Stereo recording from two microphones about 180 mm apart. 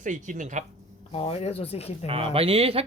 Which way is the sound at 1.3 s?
35° left (ahead or behind).